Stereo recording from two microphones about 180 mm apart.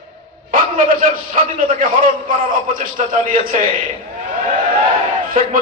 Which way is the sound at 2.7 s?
50° right (ahead or behind).